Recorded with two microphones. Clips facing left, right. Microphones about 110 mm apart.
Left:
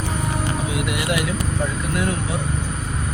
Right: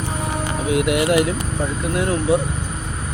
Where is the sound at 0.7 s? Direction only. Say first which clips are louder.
Right 7 dB; 55° right (ahead or behind).